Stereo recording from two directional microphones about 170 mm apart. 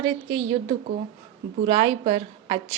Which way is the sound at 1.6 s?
30° right (ahead or behind).